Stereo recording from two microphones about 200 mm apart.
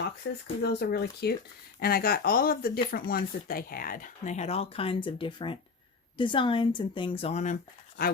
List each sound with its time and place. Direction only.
0.2 s speech: 65° left (ahead or behind)
0.6 s speech: 50° left (ahead or behind)